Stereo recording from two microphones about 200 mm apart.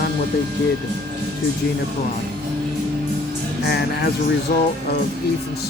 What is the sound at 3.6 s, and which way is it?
Speech, 55° left (ahead or behind).